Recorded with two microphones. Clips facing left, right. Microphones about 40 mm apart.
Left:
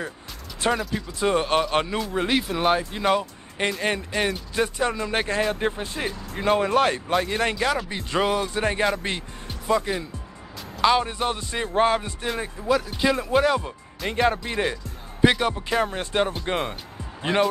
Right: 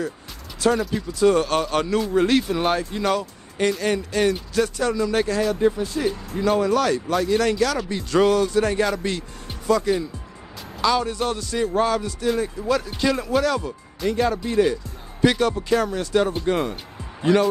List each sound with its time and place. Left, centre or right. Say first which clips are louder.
0.6 s speech: right 4 dB; left
2.0 s speech: right 5 dB; centre; by 12.3 s left
12.6 s speech: left 2 dB; centre
13.3 s speech: even; left
15.9 s speech: right 3 dB; left